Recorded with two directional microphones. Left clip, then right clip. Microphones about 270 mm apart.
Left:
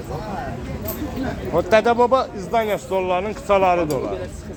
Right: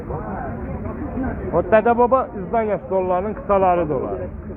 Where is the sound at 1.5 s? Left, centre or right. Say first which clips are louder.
Right 1 dB; centre.